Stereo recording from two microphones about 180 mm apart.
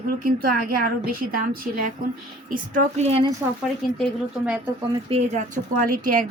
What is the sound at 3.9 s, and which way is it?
Speech, centre (ahead or behind).